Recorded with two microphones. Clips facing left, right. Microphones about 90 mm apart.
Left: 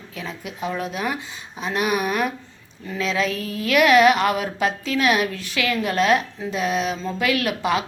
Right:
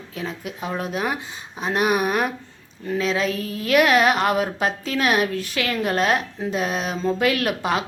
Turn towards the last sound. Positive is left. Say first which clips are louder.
# left 1 dB
turn(degrees=-40)  # may be behind; listen again after turning